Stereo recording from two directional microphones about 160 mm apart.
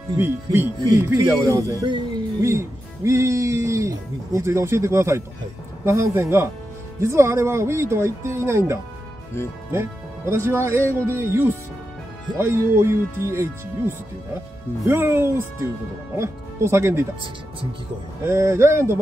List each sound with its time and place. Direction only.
0.2 s speech: 15° right (ahead or behind)
18.2 s speech: 15° right (ahead or behind)